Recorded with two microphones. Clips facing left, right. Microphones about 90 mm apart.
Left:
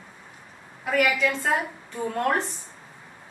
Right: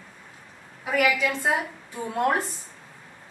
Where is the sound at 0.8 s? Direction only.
5° right (ahead or behind).